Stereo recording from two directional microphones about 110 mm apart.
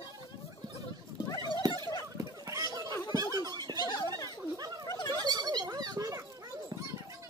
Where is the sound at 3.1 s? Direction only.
35° right (ahead or behind).